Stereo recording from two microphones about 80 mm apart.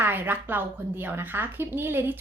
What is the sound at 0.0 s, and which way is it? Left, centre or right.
A woman's voice, right.